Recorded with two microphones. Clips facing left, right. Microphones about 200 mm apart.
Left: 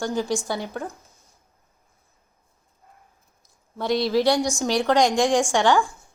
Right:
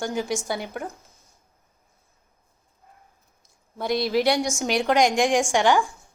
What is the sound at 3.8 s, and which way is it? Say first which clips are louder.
A woman's voice: left 2 dB; 15° right (ahead or behind).